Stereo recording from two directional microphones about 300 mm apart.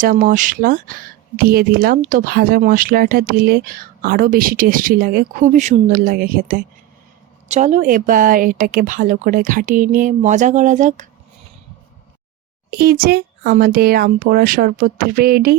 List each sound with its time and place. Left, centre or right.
0.0 s speech: right
12.7 s speech: right